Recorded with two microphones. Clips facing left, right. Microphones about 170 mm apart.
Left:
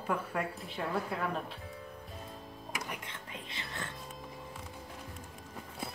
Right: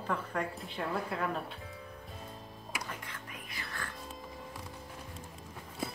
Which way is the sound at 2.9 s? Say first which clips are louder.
Left 1 dB; 25° left (ahead or behind).